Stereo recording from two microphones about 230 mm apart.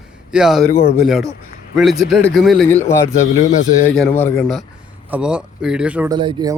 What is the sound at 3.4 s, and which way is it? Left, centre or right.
Speech, left.